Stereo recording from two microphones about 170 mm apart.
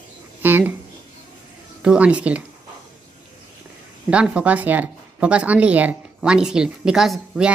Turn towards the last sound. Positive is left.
turn(degrees=-5)  # may be behind; listen again after turning